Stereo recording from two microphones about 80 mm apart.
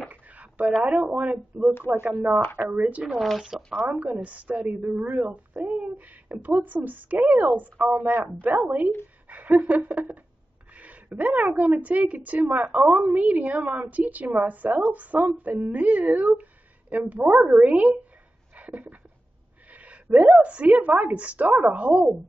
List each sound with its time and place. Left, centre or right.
0.1 s a sound: centre
1.0 s a woman's voice: right
3.1 s speech: centre
3.8 s a woman's voice: centre
18.6 s a sound: centre
19.7 s a woman's voice: centre